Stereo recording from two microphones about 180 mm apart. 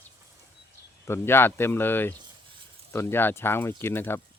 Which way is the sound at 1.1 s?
15° left (ahead or behind).